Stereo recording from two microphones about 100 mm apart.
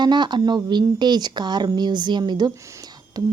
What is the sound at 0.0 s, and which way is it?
A woman's voice, 50° right (ahead or behind).